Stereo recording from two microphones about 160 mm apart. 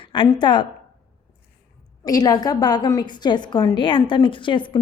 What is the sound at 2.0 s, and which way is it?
A woman's voice, 25° left (ahead or behind).